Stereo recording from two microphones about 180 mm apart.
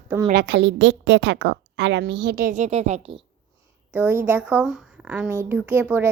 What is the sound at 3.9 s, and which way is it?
A woman's voice, 15° right (ahead or behind).